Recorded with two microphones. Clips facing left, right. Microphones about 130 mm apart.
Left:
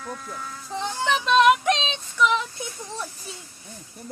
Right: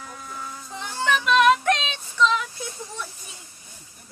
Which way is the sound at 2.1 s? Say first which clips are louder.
Even; 15° left (ahead or behind).